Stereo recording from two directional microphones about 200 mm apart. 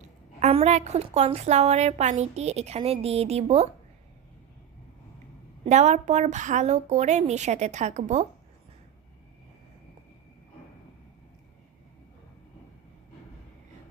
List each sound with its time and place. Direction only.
0.3 s a woman's voice: 35° right (ahead or behind)
5.6 s a woman's voice: 35° right (ahead or behind)